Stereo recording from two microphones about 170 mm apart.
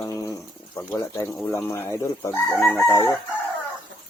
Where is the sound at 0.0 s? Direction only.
20° left (ahead or behind).